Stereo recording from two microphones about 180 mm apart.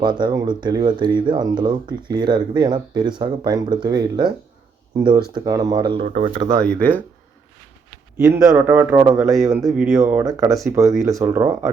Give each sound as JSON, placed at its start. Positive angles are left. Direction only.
{"t": 0.0, "sound": "speech", "side_deg": -25}
{"t": 6.1, "sound": "speech", "side_deg": -45}
{"t": 8.2, "sound": "a man's voice", "side_deg": -15}
{"t": 9.6, "sound": "speech", "side_deg": -5}
{"t": 9.9, "sound": "a man's voice", "side_deg": -15}